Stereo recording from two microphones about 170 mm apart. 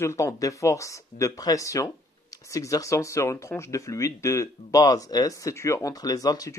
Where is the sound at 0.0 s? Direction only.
15° left (ahead or behind).